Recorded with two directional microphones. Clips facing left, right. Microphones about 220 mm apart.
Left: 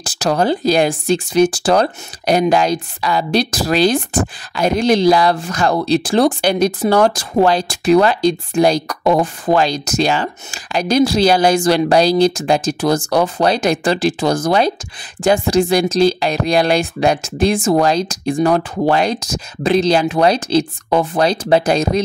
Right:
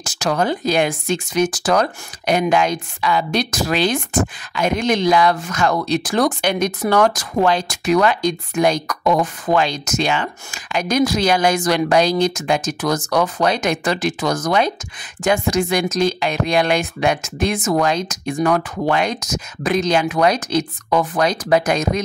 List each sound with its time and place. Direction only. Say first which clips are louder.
0.0 s speech: left 3 dB; 35° left (ahead or behind)